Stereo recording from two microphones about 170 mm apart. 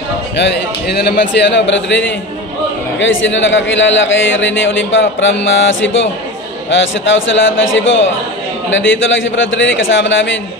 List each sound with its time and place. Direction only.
0.4 s a man's voice: 75° left (ahead or behind); by 2.0 s 90° left
3.0 s a man's voice: 90° left